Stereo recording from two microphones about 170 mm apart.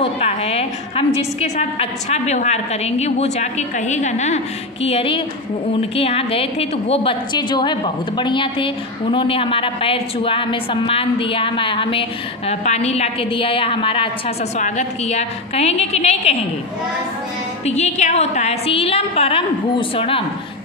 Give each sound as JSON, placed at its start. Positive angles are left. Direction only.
{"t": 0.0, "sound": "a woman's voice", "side_deg": 35}
{"t": 14.6, "sound": "a woman's voice", "side_deg": 40}
{"t": 17.6, "sound": "a woman's voice", "side_deg": 40}